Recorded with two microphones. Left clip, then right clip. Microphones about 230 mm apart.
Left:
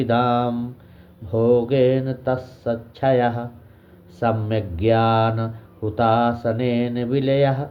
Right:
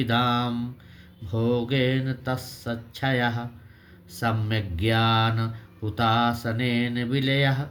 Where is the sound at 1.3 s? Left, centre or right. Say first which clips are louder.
Left 9 dB; right.